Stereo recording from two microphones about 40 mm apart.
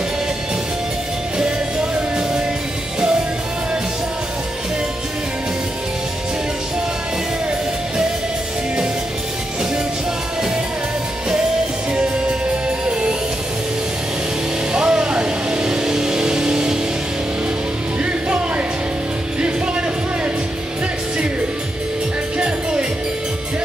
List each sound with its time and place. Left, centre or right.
1.4 s music: right
12.6 s music: right
14.7 s vehicle: right
19.4 s music: right